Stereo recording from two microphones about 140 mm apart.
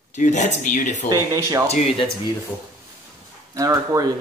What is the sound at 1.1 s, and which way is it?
Speech, 25° right (ahead or behind).